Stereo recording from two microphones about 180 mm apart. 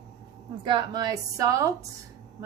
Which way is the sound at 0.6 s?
25° right (ahead or behind).